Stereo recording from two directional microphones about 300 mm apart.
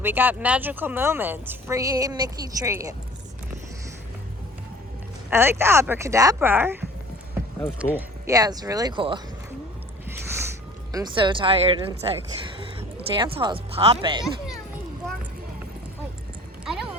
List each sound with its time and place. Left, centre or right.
0.0 s speech: centre
5.3 s speech: centre
7.8 s speech: centre
10.1 s a sound: centre
10.9 s speech: centre
13.0 s speech: centre